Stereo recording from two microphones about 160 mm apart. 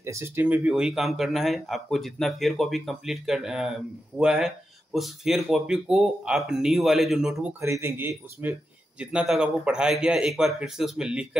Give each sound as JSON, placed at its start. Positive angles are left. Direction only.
{"t": 0.0, "sound": "speech", "side_deg": -15}
{"t": 7.6, "sound": "speech", "side_deg": -15}